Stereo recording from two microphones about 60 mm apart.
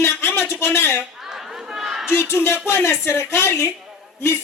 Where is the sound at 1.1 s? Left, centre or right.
Centre.